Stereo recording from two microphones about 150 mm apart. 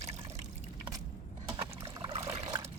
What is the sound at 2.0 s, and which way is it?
Trickle, 45° right (ahead or behind).